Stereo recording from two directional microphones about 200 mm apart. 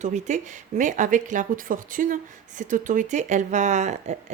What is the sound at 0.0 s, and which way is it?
Speech, 35° right (ahead or behind).